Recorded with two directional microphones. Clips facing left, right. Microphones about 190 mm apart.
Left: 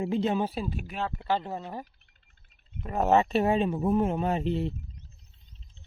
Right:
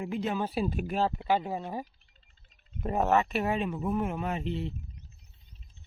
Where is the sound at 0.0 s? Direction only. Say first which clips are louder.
Left 5 dB; 25° left (ahead or behind).